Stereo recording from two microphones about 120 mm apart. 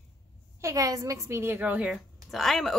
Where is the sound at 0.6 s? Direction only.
30° right (ahead or behind); by 2.0 s 10° right (ahead or behind).